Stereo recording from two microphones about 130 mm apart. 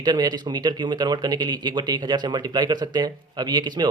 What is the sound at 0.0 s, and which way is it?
Speech, 35° right (ahead or behind).